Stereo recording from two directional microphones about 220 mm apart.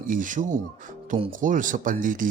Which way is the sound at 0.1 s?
35° right (ahead or behind).